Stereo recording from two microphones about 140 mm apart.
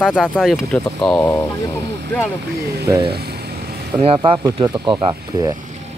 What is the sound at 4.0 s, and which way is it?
Speech, 40° right (ahead or behind).